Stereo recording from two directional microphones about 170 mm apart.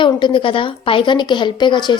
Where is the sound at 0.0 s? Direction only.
30° left (ahead or behind).